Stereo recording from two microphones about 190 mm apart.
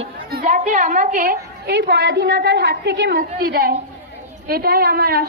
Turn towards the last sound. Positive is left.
turn(degrees=-50)  # may be behind; listen again after turning